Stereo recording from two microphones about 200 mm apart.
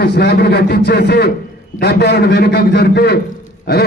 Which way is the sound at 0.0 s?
55° left (ahead or behind).